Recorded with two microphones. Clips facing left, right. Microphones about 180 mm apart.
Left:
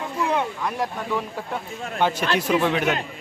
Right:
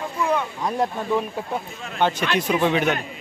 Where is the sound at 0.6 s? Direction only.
20° right (ahead or behind).